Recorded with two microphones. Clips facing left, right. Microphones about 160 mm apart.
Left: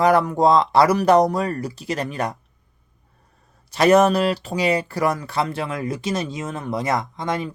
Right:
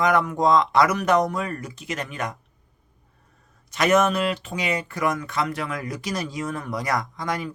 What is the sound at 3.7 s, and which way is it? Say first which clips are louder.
Speech: left 5 dB; 35° left (ahead or behind).